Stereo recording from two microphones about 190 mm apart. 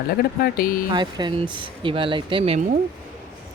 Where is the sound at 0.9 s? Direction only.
25° right (ahead or behind).